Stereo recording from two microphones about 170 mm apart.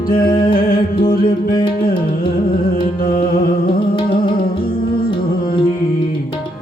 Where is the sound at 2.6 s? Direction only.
60° left (ahead or behind).